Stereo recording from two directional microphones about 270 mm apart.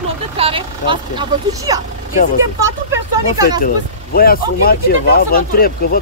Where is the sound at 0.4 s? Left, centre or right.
Centre.